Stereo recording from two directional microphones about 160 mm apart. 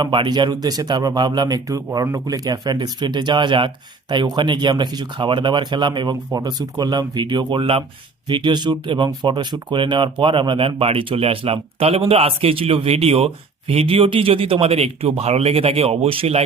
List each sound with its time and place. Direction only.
0.0 s speech: 30° right (ahead or behind)